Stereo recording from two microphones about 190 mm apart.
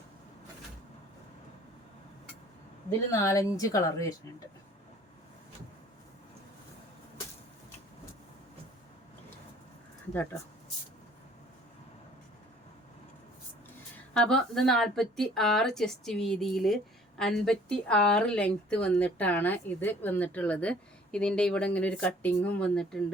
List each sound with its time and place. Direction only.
3.1 s speech: 15° left (ahead or behind)
14.1 s a woman's voice: 5° left (ahead or behind)